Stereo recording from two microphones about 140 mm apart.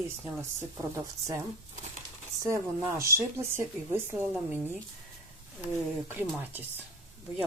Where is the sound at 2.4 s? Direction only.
20° right (ahead or behind).